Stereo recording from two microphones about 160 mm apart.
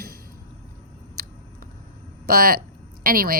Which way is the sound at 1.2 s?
70° right (ahead or behind).